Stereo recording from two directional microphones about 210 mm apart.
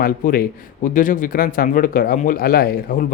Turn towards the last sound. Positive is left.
turn(degrees=45)  # may be behind; listen again after turning